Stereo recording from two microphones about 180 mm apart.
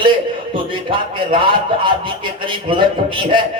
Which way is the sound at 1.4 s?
25° right (ahead or behind).